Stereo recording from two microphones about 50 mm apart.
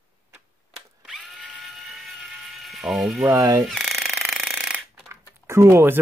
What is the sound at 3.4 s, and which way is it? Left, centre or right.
Speech, right.